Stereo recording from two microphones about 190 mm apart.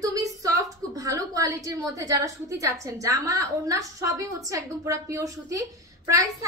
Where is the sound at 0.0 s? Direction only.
20° right (ahead or behind).